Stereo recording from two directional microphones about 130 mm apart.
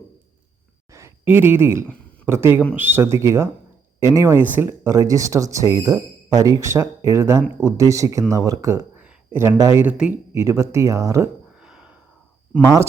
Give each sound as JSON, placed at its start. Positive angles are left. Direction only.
{"t": 0.9, "sound": "a sound", "side_deg": -20}
{"t": 2.2, "sound": "a man's voice", "side_deg": -20}
{"t": 9.0, "sound": "a sound", "side_deg": -15}
{"t": 9.6, "sound": "speech", "side_deg": -25}
{"t": 9.8, "sound": "a man's voice", "side_deg": -10}
{"t": 10.3, "sound": "speech", "side_deg": -20}
{"t": 11.6, "sound": "gasp", "side_deg": -5}